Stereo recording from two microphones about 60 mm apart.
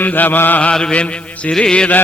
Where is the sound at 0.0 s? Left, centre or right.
Left.